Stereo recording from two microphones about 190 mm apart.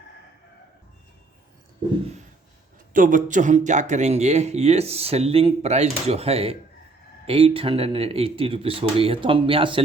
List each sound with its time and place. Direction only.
2.9 s speech: 45° right (ahead or behind); by 9.8 s 25° right (ahead or behind)